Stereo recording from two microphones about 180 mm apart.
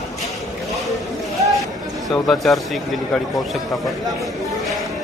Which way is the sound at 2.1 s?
Centre (ahead or behind).